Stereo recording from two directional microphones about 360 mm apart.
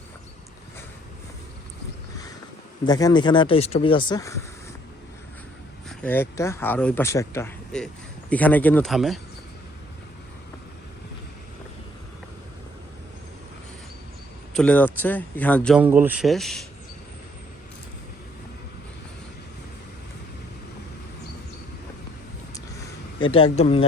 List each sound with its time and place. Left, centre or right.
2.8 s speech: centre
5.9 s speech: centre
14.5 s speech: centre
23.2 s speech: centre